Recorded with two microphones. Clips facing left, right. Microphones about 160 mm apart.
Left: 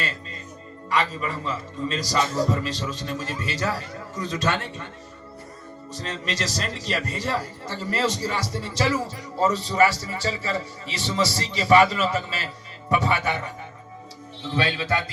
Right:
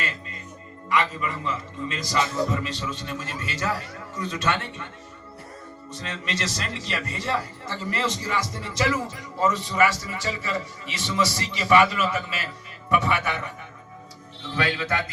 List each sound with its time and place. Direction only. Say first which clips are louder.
0.9 s a man's voice: even; 35° left (ahead or behind)
5.9 s a man's voice: left 1 dB; 35° left (ahead or behind)
14.5 s a man's voice: left 1 dB; 30° left (ahead or behind)